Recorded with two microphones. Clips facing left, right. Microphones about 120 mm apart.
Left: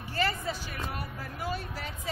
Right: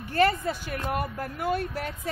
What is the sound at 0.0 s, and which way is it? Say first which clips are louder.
A woman's voice: right 8 dB; 55° right (ahead or behind).